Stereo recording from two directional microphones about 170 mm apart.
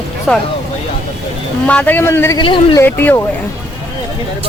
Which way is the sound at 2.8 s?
10° left (ahead or behind).